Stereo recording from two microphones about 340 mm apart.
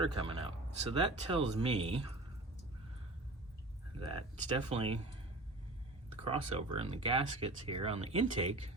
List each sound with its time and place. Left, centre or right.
0.0 s speech: centre
4.0 s speech: centre
6.1 s speech: centre